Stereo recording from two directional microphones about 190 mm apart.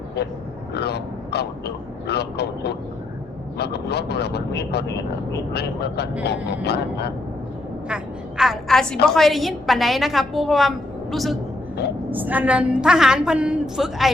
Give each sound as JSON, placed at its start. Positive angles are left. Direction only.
{"t": 0.7, "sound": "speech", "side_deg": 60}
{"t": 7.9, "sound": "a woman's voice", "side_deg": -5}